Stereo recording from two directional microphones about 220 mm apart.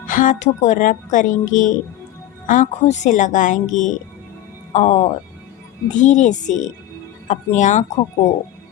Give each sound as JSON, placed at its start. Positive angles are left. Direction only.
{"t": 0.1, "sound": "speech", "side_deg": 35}